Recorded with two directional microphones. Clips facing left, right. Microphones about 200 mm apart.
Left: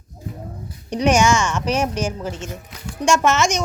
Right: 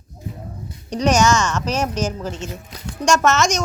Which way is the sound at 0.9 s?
10° left (ahead or behind).